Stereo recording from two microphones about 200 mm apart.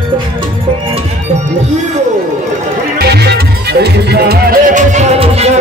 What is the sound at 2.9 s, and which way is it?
Music, 55° right (ahead or behind).